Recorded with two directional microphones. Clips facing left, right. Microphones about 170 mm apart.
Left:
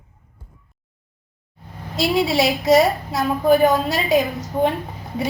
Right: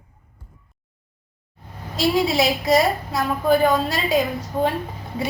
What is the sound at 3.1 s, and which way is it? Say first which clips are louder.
A woman's voice: left 2 dB; 20° left (ahead or behind).